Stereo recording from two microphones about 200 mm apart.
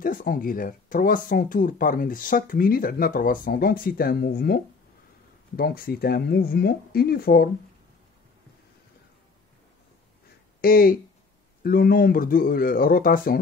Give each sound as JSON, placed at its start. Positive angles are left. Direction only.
{"t": 0.0, "sound": "speech", "side_deg": 45}
{"t": 5.6, "sound": "speech", "side_deg": 50}
{"t": 10.6, "sound": "speech", "side_deg": 45}